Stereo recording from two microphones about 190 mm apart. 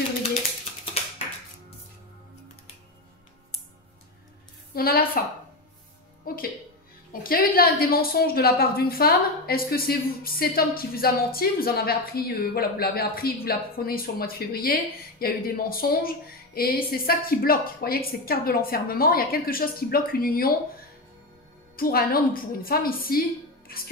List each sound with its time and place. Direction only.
4.7 s music: 50° left (ahead or behind)
6.2 s music: 50° left (ahead or behind)
7.1 s a woman's voice: 50° left (ahead or behind)
21.7 s a woman's voice: 50° left (ahead or behind)